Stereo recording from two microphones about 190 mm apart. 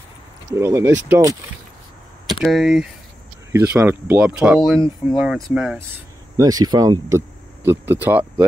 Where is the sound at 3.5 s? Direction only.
15° right (ahead or behind).